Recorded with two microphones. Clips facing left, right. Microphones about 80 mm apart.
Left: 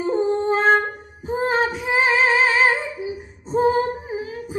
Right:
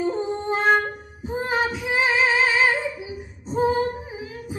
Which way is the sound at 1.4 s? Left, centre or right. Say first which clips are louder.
Left 3 dB; left.